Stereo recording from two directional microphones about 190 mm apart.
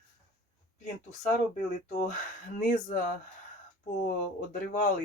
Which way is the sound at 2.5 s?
45° left (ahead or behind).